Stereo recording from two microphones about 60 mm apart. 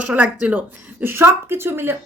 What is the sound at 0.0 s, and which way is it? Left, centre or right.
Speech, right.